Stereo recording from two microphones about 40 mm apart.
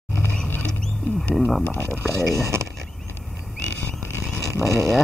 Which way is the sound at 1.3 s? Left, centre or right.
Centre.